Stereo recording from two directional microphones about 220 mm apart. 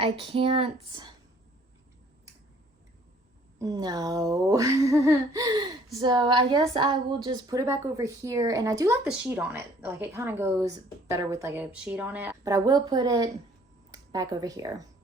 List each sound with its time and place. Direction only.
0.0 s speech: 25° right (ahead or behind)
3.6 s a woman's voice: 15° right (ahead or behind)